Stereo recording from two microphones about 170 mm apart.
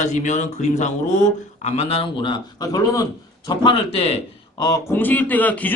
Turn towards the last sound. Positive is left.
turn(degrees=10)  # may be behind; listen again after turning